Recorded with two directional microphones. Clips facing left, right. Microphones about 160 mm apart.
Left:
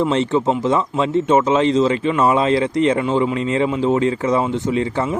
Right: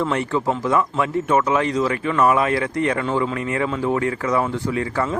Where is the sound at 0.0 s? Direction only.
20° left (ahead or behind).